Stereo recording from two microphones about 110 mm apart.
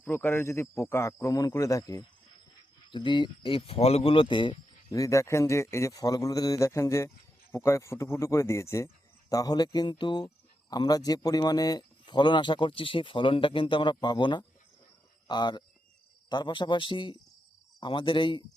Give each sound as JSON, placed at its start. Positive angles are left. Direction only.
{"t": 0.0, "sound": "a man's voice", "side_deg": 20}
{"t": 2.9, "sound": "speech", "side_deg": 45}
{"t": 4.9, "sound": "a man's voice", "side_deg": 30}